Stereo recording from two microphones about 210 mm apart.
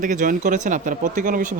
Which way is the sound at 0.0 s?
40° right (ahead or behind).